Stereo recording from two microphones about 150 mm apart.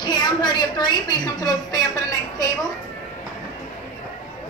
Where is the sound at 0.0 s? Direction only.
30° left (ahead or behind).